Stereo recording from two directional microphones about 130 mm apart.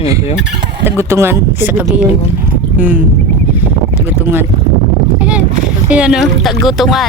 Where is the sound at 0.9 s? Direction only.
20° right (ahead or behind).